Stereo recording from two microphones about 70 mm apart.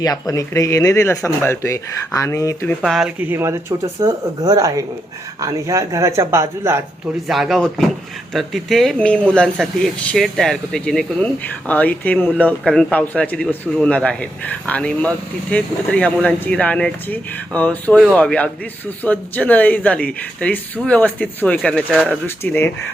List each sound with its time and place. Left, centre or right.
0.0 s speech: left
2.8 s speech: centre
3.2 s speech: right
4.4 s a woman's voice: right
7.3 s speech: centre
9.0 s speech: centre
10.2 s a man's voice: centre
22.0 s a man's voice: left